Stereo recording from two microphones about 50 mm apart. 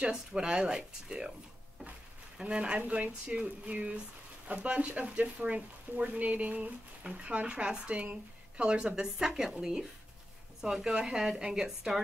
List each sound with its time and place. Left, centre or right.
0.0 s a woman's voice: centre
2.3 s speech: right
3.6 s a sound: right
4.5 s a woman's voice: right; by 12.0 s centre